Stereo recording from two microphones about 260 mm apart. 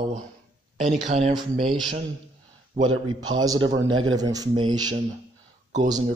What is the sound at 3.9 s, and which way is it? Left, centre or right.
Speech, right.